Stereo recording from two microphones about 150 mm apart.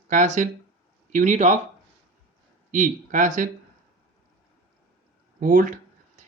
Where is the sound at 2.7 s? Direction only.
60° right (ahead or behind).